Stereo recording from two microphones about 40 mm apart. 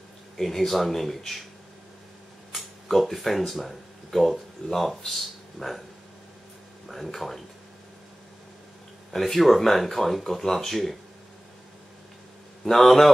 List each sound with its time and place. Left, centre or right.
0.4 s speech: centre
2.5 s speech: centre
6.9 s speech: centre
9.1 s speech: centre
12.6 s speech: centre